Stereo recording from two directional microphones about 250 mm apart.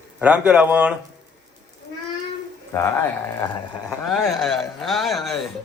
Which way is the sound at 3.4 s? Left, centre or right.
Centre.